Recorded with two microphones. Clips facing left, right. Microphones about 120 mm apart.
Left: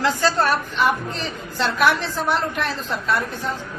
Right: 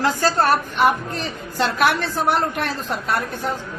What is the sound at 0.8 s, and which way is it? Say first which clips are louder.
A woman's voice: right 2 dB; 55° right (ahead or behind).